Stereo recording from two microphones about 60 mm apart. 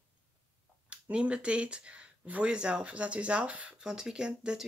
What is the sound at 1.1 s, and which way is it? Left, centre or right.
Speech, centre.